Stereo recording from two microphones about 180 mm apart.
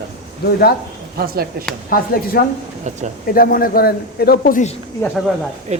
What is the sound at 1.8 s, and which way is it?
A man's voice, 55° left (ahead or behind).